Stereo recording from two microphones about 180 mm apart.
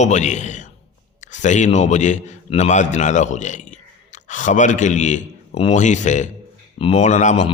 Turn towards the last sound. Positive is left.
turn(degrees=40)  # may be behind; listen again after turning